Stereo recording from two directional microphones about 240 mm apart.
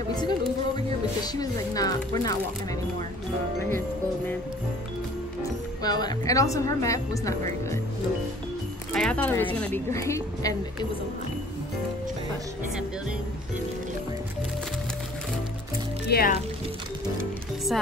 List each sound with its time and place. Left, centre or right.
1.2 s speech: centre
5.4 s speech: centre
8.9 s speech: centre
16.1 s speech: left